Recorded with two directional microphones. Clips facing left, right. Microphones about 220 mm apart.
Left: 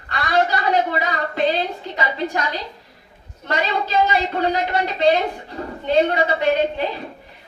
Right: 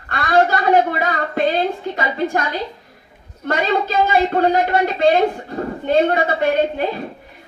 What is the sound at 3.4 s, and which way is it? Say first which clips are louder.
A woman's voice: right 4 dB; 50° right (ahead or behind).